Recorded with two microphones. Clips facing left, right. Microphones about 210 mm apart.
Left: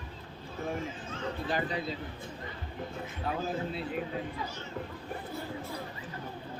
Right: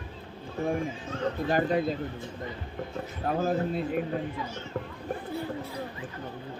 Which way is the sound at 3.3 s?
50° right (ahead or behind).